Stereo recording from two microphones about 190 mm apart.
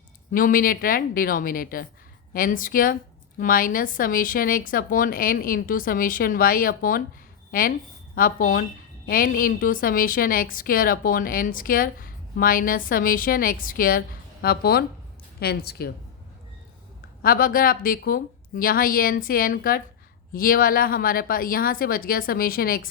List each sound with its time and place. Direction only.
0.3 s a woman's voice: 45° left (ahead or behind)
17.2 s a woman's voice: 50° left (ahead or behind)